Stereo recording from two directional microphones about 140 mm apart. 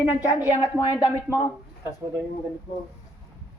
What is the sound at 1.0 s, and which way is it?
Speech, 15° right (ahead or behind).